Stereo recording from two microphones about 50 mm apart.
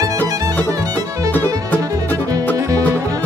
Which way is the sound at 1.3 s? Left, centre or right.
Left.